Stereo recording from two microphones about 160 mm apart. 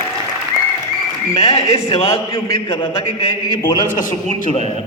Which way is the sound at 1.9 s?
35° left (ahead or behind).